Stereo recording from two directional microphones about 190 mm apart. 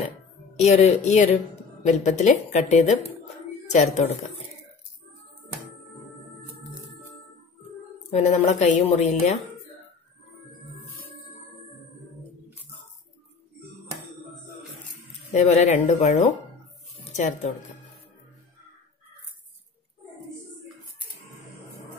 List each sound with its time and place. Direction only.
0.6 s a woman's voice: 35° left (ahead or behind)
8.1 s a woman's voice: 35° left (ahead or behind)
15.3 s a woman's voice: 35° left (ahead or behind)